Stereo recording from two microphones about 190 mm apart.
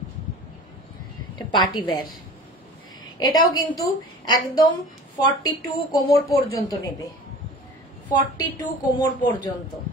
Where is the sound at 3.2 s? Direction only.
20° left (ahead or behind).